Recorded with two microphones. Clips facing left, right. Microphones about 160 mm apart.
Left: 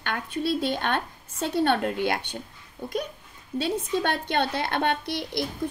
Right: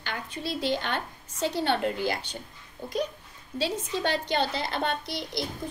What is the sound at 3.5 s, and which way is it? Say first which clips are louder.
A woman's voice: left 4 dB; 55° left (ahead or behind).